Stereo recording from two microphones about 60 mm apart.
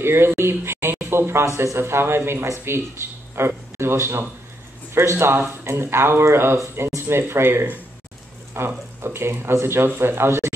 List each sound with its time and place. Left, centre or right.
0.0 s a man's voice: right